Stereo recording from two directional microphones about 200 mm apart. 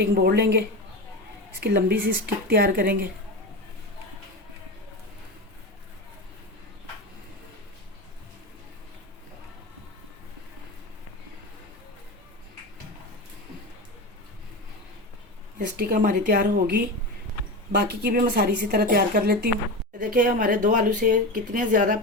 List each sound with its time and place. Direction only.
0.0 s speech: 50° right (ahead or behind)
1.6 s speech: 55° right (ahead or behind)
15.5 s speech: 45° right (ahead or behind)